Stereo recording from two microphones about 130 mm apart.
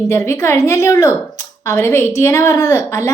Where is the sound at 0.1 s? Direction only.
20° left (ahead or behind).